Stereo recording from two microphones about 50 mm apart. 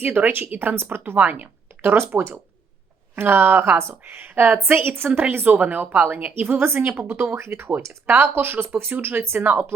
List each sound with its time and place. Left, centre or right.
0.0 s a woman's voice: right
3.2 s a woman's voice: right
6.6 s a woman's voice: right
7.8 s speech: right
8.4 s a woman's voice: right